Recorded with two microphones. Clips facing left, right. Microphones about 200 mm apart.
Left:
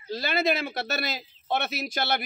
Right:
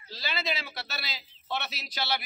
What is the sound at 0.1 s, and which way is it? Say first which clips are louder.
Speech: left 9 dB; 50° left (ahead or behind).